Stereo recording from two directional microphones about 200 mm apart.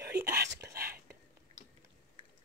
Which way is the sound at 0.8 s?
50° right (ahead or behind).